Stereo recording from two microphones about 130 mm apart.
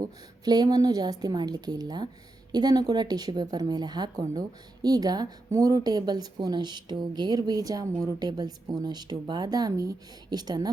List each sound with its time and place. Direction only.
0.0 s speech: 30° right (ahead or behind)